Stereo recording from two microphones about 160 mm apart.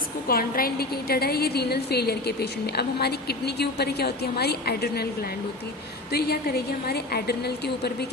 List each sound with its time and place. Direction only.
0.3 s a woman's voice: 65° left (ahead or behind)
6.1 s a woman's voice: 85° left